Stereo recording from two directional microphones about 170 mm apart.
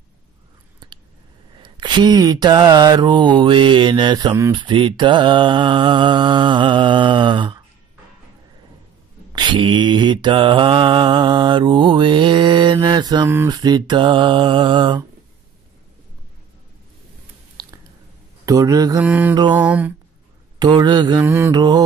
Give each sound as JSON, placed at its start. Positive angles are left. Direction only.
{"t": 0.8, "sound": "a sound", "side_deg": -25}
{"t": 1.6, "sound": "mantra", "side_deg": -25}
{"t": 9.3, "sound": "mantra", "side_deg": -25}
{"t": 17.6, "sound": "chewing", "side_deg": -25}
{"t": 18.4, "sound": "mantra", "side_deg": -20}
{"t": 19.0, "sound": "a sound", "side_deg": -10}
{"t": 20.5, "sound": "mantra", "side_deg": -25}